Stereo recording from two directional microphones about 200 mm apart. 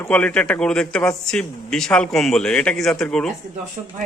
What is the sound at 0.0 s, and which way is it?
A man's voice, 5° left (ahead or behind).